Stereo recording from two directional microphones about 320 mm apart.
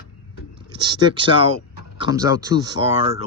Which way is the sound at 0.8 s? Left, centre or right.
Centre.